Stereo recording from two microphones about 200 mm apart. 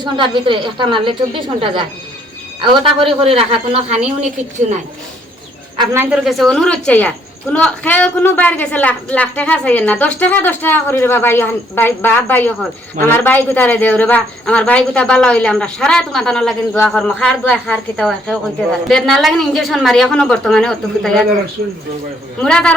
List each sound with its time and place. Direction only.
0.0 s a woman's voice: 25° right (ahead or behind)
5.7 s a man's voice: 20° right (ahead or behind)
6.0 s speech: 5° right (ahead or behind)
22.4 s speech: 5° left (ahead or behind)